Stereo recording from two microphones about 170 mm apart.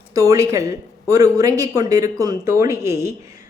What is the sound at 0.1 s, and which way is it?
Speech, 20° right (ahead or behind).